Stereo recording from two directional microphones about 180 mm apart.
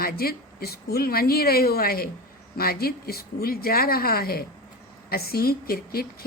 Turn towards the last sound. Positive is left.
turn(degrees=55)  # may be behind; listen again after turning